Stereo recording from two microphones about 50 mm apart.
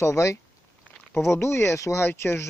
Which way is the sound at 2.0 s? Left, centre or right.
Left.